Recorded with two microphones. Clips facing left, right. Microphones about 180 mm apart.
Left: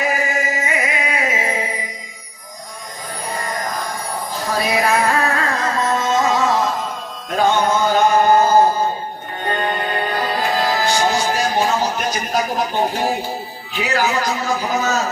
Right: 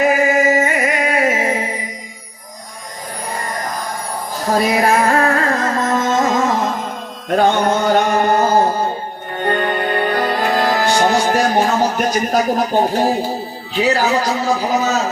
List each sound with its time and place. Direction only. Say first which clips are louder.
0.3 s music: right 7 dB; 50° right (ahead or behind)
4.4 s music: right 4 dB; 45° right (ahead or behind)
13.7 s speech: right 4 dB; 30° right (ahead or behind)